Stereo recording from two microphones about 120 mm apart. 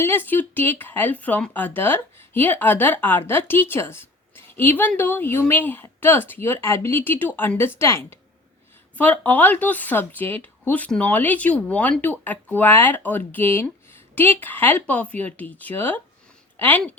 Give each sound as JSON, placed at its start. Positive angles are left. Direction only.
{"t": 0.0, "sound": "speech", "side_deg": 20}